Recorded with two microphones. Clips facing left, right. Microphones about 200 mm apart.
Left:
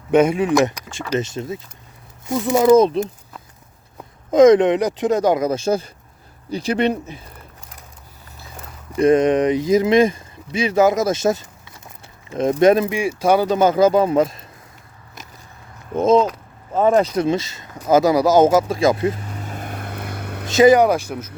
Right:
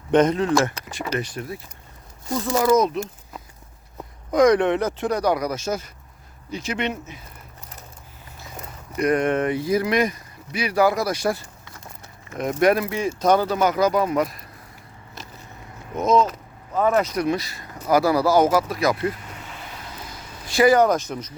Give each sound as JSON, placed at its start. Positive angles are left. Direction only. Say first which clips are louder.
{"t": 0.1, "sound": "speech", "louder": "left 3 dB", "side_deg": 10}
{"t": 4.3, "sound": "speech", "louder": "left 6 dB", "side_deg": 20}
{"t": 9.0, "sound": "speech", "louder": "left 6 dB", "side_deg": 25}
{"t": 13.0, "sound": "speech", "louder": "left 2 dB", "side_deg": 10}
{"t": 13.5, "sound": "speech", "louder": "left 5 dB", "side_deg": 25}
{"t": 16.7, "sound": "speech", "louder": "left 4 dB", "side_deg": 30}
{"t": 19.4, "sound": "vehicle", "louder": "left 8 dB", "side_deg": 45}
{"t": 20.5, "sound": "speech", "louder": "left 4 dB", "side_deg": 20}